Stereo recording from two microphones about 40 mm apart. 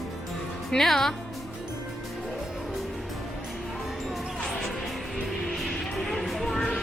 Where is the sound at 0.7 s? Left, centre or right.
Centre.